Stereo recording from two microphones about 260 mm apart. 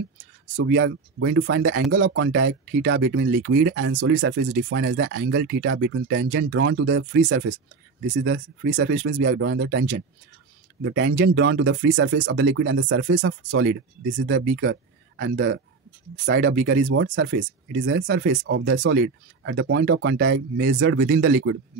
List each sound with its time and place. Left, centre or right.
0.6 s speech: right